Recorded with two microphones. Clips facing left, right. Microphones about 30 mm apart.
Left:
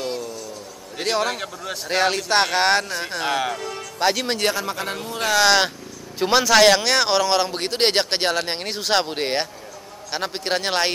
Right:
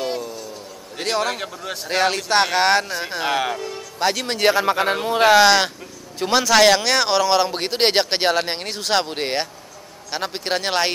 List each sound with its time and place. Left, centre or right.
0.0 s a sound: centre
0.9 s a man's voice: centre
4.5 s speech: right
5.4 s a man's voice: centre